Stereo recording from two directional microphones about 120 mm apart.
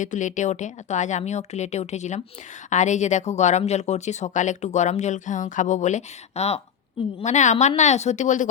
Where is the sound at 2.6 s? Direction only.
90° left; by 6.6 s 65° left (ahead or behind).